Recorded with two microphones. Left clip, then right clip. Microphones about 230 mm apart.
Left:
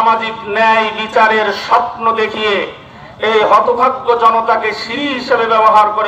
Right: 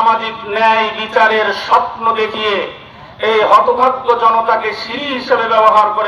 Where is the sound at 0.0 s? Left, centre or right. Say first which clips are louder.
Even; left.